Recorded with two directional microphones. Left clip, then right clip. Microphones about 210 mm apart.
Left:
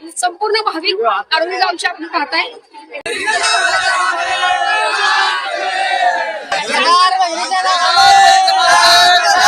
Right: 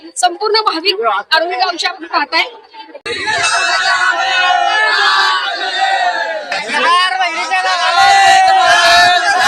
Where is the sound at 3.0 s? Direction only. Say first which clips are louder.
Even; 15° left (ahead or behind).